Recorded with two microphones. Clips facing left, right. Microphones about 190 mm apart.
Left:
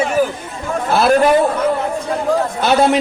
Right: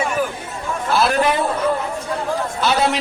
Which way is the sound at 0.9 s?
45° left (ahead or behind).